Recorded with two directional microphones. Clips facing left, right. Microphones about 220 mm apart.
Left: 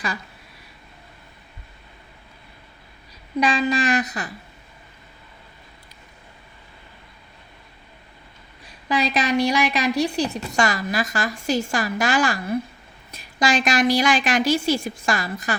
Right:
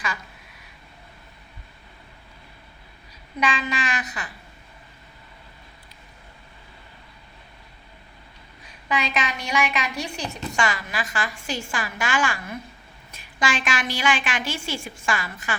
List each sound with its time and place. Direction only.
3.4 s a woman's voice: 35° left (ahead or behind)
8.9 s a woman's voice: 35° left (ahead or behind)